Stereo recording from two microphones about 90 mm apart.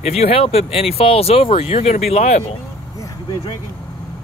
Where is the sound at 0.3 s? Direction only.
90° left.